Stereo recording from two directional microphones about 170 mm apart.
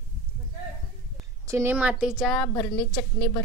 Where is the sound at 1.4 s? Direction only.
15° right (ahead or behind); by 2.4 s centre (ahead or behind).